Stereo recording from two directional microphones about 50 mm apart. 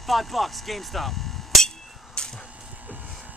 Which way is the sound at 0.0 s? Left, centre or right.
Centre.